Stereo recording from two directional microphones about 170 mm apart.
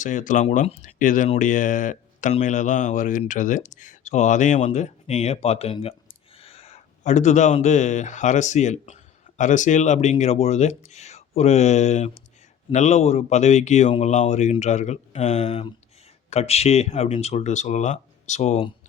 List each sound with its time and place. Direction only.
0.0 s speech: 50° left (ahead or behind)